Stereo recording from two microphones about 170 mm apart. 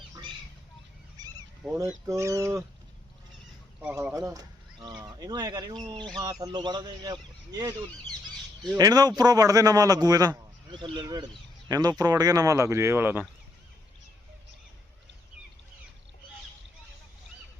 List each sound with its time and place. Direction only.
1.2 s goose: 25° right (ahead or behind)
1.6 s speech: 5° right (ahead or behind)
2.0 s speech: 20° right (ahead or behind)
3.8 s a man's voice: 10° right (ahead or behind)
8.8 s a man's voice: 25° right (ahead or behind)